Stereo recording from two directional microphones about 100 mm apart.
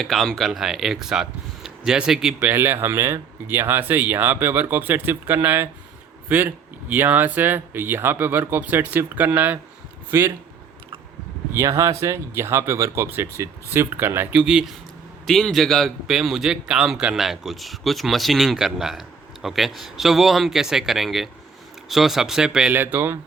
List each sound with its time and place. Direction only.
0.0 s speech: 5° left (ahead or behind)
2.5 s speech: 20° right (ahead or behind)
11.5 s speech: 30° right (ahead or behind)
14.4 s speech: 5° right (ahead or behind)
22.7 s speech: 20° right (ahead or behind)